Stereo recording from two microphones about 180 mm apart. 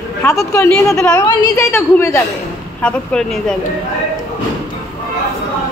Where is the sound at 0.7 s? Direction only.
5° left (ahead or behind).